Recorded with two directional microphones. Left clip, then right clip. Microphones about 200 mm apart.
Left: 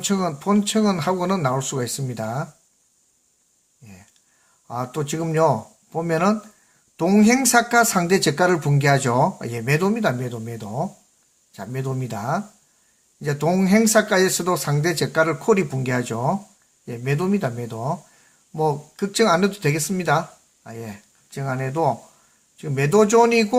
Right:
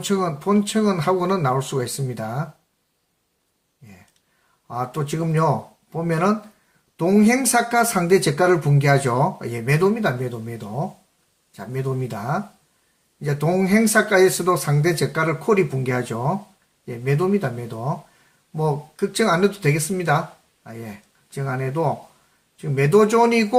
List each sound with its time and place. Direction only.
0.0 s speech: 35° left (ahead or behind)
4.7 s speech: 35° left (ahead or behind)